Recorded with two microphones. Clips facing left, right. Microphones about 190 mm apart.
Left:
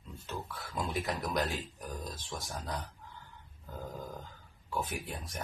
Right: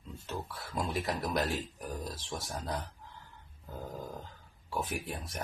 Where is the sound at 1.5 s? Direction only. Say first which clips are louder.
Right 3 dB; 25° right (ahead or behind).